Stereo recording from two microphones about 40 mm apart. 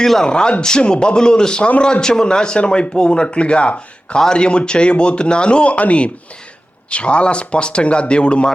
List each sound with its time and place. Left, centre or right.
0.0 s speech: centre